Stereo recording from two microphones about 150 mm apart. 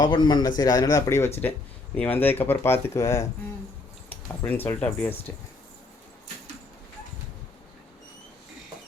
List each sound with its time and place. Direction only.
0.0 s speech: 30° left (ahead or behind); by 5.1 s 15° left (ahead or behind)